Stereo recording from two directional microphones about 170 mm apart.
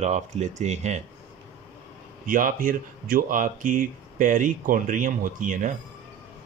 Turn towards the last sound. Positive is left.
turn(degrees=-50)  # may be behind; listen again after turning